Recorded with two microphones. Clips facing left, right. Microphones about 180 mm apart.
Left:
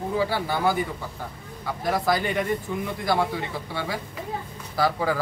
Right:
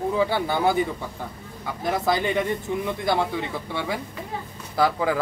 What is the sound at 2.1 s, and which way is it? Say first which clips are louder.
Speech: right 2 dB; 25° right (ahead or behind).